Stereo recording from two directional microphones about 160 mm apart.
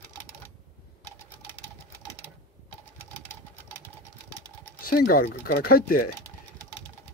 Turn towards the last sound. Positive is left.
turn(degrees=65)  # may be behind; listen again after turning